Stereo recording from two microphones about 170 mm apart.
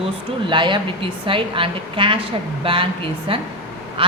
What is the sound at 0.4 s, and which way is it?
A woman's voice, 30° right (ahead or behind).